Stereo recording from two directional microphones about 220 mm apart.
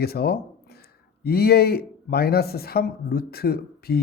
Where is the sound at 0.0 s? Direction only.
45° left (ahead or behind).